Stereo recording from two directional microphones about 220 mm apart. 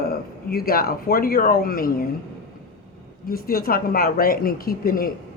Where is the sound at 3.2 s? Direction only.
45° left (ahead or behind).